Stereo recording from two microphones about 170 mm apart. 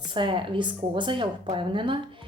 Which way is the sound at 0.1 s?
30° right (ahead or behind).